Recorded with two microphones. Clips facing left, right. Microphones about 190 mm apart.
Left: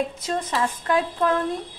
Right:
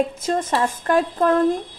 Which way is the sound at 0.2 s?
50° right (ahead or behind).